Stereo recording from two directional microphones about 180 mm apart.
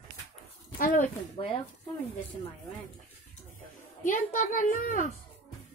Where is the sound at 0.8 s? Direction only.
45° left (ahead or behind).